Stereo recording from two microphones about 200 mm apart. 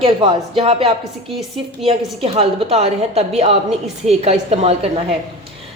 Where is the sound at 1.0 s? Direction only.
Centre (ahead or behind).